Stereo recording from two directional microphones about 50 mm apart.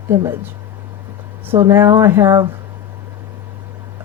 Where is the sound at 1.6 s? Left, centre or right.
Right.